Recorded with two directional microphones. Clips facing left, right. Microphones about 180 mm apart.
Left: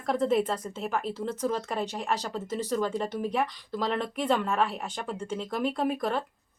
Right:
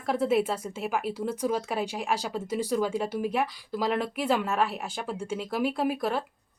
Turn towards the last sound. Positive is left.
turn(degrees=-5)  # may be behind; listen again after turning